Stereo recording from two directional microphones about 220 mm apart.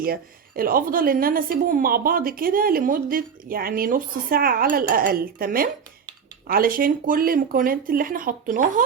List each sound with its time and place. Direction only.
0.0 s a woman's voice: 40° right (ahead or behind)